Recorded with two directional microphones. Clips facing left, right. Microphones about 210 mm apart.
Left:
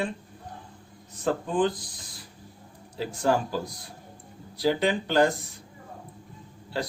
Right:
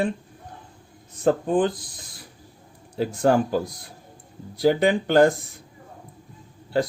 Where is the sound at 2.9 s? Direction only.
55° right (ahead or behind).